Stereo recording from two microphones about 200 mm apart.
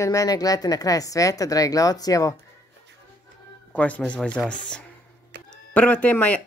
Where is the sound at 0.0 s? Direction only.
15° left (ahead or behind).